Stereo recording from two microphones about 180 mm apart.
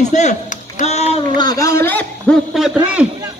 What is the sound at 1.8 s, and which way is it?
A man's voice, 10° left (ahead or behind).